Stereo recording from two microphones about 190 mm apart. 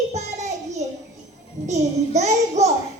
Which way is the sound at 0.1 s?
35° right (ahead or behind).